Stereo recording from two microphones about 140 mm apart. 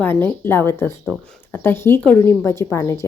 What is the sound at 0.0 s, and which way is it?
A woman's voice, 15° left (ahead or behind).